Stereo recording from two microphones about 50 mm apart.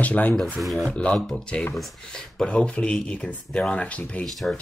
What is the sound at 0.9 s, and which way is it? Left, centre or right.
Speech, centre.